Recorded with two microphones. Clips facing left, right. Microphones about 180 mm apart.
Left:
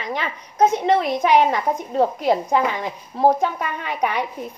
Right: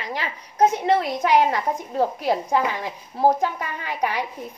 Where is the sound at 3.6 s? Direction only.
60° left (ahead or behind).